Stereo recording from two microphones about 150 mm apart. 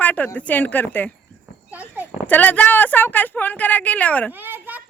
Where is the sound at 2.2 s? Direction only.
10° left (ahead or behind).